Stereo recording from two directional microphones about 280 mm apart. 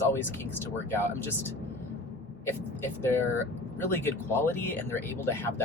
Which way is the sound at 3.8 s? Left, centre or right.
Centre.